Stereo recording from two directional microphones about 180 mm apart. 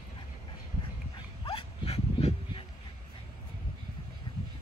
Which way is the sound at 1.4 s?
30° left (ahead or behind).